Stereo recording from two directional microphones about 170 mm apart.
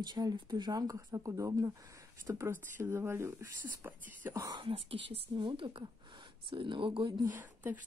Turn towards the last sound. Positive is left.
turn(degrees=-10)  # may be behind; listen again after turning